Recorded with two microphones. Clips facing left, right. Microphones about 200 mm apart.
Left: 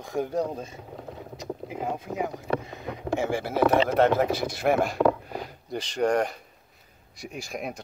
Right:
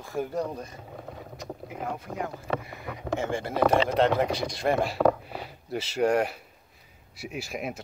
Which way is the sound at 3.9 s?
5° left (ahead or behind).